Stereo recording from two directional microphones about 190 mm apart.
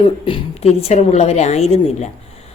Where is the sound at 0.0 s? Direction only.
30° left (ahead or behind).